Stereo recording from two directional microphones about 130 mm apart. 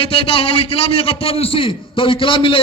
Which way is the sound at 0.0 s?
45° left (ahead or behind).